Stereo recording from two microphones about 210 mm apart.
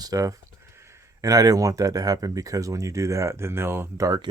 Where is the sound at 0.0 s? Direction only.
15° right (ahead or behind).